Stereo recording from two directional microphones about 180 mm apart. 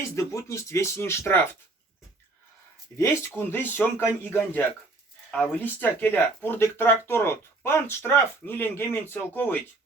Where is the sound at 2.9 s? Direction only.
10° left (ahead or behind).